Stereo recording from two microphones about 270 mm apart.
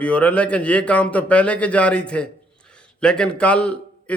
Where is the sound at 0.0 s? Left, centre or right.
Centre.